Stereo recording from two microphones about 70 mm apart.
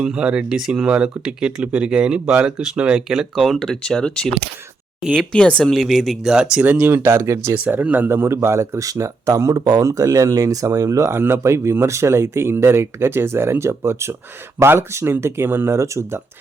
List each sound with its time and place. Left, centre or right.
0.0 s speech: centre
3.6 s speech: centre
5.7 s speech: centre
6.2 s speech: centre
6.6 s speech: right
7.5 s speech: right
9.8 s speech: right